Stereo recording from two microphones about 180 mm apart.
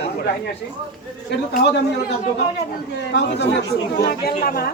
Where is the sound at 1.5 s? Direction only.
70° left (ahead or behind).